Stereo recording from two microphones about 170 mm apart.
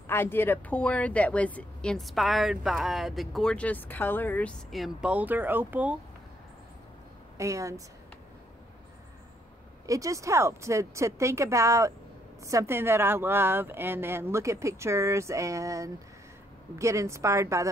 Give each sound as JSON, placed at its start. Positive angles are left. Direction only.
{"t": 0.0, "sound": "speech", "side_deg": 15}
{"t": 7.3, "sound": "a woman's voice", "side_deg": -20}
{"t": 9.8, "sound": "speech", "side_deg": -20}